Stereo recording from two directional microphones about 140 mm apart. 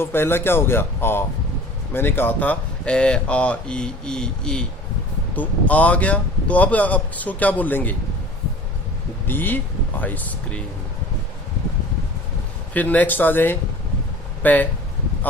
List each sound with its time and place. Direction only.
0.0 s speech: 15° left (ahead or behind)
9.2 s speech: 15° left (ahead or behind)
12.7 s speech: 10° left (ahead or behind)